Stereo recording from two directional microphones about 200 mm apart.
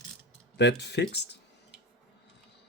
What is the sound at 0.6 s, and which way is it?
Speech, 60° left (ahead or behind).